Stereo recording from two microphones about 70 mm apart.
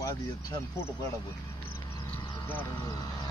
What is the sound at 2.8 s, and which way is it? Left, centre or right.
Speech, left.